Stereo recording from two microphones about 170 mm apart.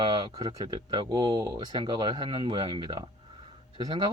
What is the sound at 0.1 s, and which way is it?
Speech, 25° right (ahead or behind).